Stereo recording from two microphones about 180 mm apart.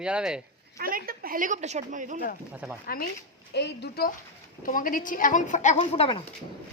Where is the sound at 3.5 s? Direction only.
70° left (ahead or behind).